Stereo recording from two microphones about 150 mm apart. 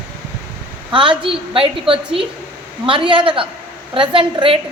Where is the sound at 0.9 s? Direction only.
35° right (ahead or behind).